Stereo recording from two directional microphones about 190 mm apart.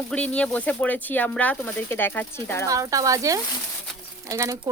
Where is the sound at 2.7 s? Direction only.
15° right (ahead or behind).